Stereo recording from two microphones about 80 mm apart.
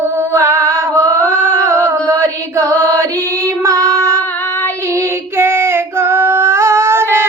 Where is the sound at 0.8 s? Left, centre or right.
Right.